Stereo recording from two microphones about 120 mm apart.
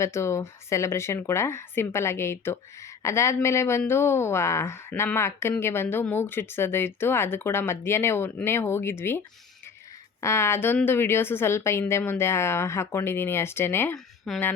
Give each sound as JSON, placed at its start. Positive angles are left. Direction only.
{"t": 0.0, "sound": "speech", "side_deg": 25}
{"t": 14.3, "sound": "speech", "side_deg": 5}